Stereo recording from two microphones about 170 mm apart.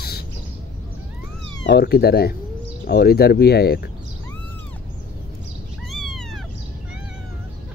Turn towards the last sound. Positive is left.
turn(degrees=0)  # may be behind; listen again after turning